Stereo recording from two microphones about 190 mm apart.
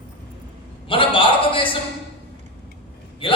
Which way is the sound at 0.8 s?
25° left (ahead or behind).